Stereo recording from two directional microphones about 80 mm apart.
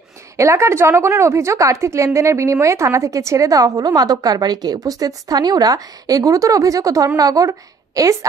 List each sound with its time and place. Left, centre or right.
0.4 s a woman's voice: right